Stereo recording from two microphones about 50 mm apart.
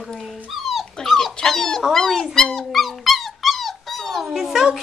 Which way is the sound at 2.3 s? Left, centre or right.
Centre.